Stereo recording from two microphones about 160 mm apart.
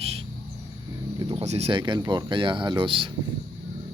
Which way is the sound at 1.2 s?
40° right (ahead or behind).